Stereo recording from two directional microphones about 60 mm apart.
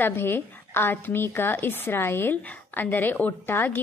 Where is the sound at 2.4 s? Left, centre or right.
Left.